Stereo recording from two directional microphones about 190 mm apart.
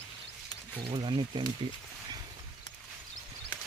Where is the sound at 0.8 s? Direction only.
25° right (ahead or behind).